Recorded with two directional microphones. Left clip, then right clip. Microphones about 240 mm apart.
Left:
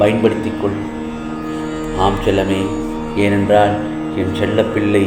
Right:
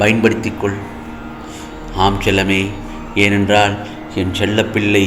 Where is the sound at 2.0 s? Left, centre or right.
Right.